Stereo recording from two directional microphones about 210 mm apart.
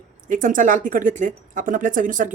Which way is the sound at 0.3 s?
40° right (ahead or behind).